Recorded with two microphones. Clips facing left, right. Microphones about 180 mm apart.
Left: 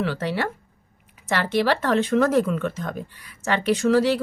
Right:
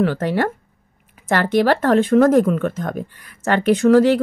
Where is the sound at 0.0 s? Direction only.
50° right (ahead or behind).